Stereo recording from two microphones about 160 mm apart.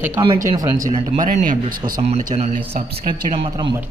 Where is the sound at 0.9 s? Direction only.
40° right (ahead or behind).